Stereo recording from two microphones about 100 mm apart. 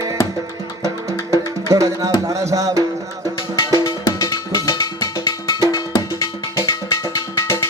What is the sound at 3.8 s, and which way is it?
Cowbell, 30° left (ahead or behind).